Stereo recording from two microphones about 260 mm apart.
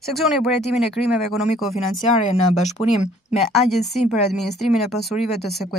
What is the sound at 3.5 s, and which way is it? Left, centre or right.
Speech, centre.